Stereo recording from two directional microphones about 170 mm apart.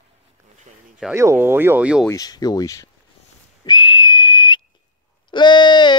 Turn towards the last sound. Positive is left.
turn(degrees=25)  # may be behind; listen again after turning